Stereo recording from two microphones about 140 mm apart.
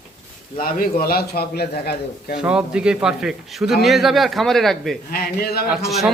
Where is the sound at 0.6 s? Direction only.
85° left.